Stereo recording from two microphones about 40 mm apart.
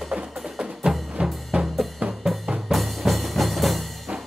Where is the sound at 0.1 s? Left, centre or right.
Right.